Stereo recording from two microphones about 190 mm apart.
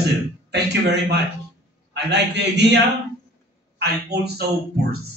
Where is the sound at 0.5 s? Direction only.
60° right (ahead or behind).